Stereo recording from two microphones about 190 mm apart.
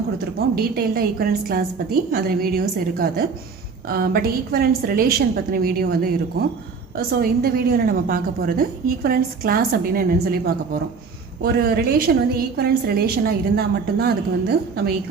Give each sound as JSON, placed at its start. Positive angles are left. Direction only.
{"t": 0.5, "sound": "a woman's voice", "side_deg": -55}